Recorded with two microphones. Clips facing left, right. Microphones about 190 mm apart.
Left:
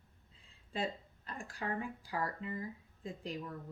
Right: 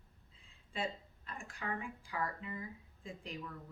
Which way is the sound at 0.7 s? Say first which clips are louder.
Left 2 dB; 35° left (ahead or behind).